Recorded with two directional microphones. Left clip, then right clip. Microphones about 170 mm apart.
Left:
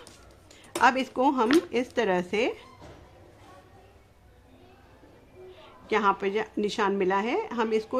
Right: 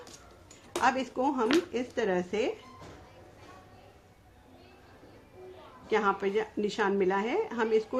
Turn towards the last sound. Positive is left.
turn(degrees=30)  # may be behind; listen again after turning